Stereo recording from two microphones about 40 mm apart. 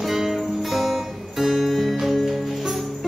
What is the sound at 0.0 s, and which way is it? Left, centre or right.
Music, centre.